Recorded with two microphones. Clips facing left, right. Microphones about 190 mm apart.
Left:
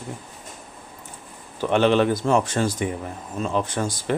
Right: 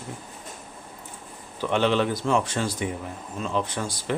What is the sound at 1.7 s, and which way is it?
Speech, 50° left (ahead or behind).